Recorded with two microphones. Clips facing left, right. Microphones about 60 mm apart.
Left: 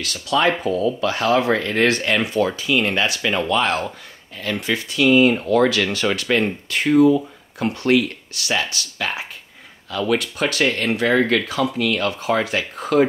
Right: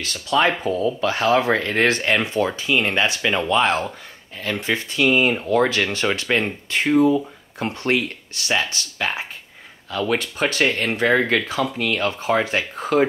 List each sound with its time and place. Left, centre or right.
0.0 s speech: right